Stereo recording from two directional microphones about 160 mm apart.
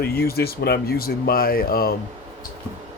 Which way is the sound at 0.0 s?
75° left (ahead or behind).